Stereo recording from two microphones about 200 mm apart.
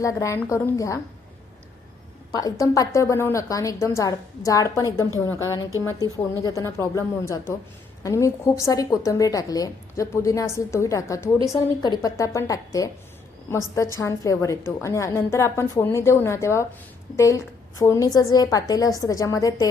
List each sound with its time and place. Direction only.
0.0 s a woman's voice: 15° left (ahead or behind)
2.3 s a woman's voice: 15° left (ahead or behind)